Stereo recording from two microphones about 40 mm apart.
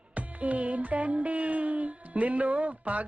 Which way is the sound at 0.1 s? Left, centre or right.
Right.